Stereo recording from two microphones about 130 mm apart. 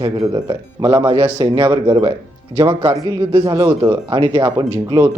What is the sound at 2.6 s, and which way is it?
Speech, 35° right (ahead or behind).